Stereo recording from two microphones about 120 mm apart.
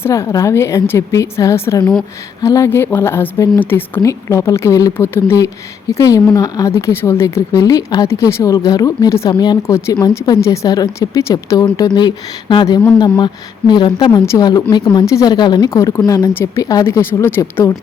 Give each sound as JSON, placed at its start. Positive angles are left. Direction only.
{"t": 0.0, "sound": "speech", "side_deg": 25}
{"t": 3.6, "sound": "speech", "side_deg": 15}
{"t": 9.7, "sound": "speech", "side_deg": 25}
{"t": 11.6, "sound": "speech", "side_deg": 35}